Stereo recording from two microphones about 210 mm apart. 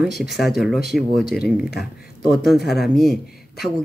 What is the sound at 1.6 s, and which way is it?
Speech, 50° left (ahead or behind).